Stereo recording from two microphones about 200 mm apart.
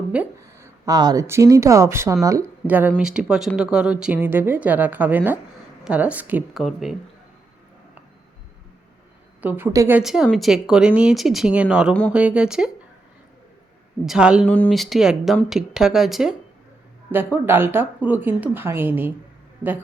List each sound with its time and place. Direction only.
0.1 s speech: 10° right (ahead or behind)
9.4 s speech: 10° right (ahead or behind)
14.0 s speech: 5° right (ahead or behind)
14.4 s speech: 10° left (ahead or behind)
17.3 s speech: 10° right (ahead or behind)